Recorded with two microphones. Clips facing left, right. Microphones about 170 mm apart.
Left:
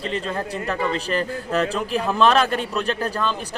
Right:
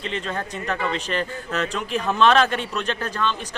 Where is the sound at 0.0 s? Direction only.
35° left (ahead or behind).